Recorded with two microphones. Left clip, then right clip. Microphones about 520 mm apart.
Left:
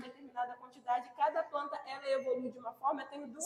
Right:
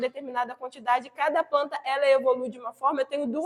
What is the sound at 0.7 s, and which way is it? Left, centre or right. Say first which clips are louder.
Speech: right 12 dB; right.